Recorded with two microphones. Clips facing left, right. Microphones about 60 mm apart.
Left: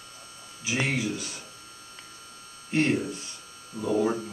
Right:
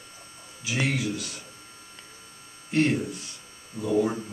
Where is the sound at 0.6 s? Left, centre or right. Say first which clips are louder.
Even; centre.